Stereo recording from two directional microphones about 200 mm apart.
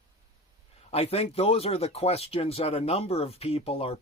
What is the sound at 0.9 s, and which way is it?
Speech, 30° left (ahead or behind).